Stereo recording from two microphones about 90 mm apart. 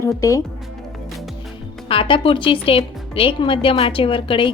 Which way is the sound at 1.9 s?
75° left (ahead or behind).